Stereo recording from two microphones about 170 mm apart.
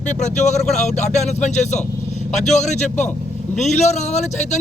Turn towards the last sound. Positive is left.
turn(degrees=45)  # may be behind; listen again after turning